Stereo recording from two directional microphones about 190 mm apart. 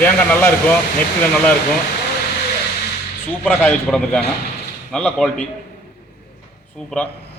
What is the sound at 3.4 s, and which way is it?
A man's voice, 5° left (ahead or behind).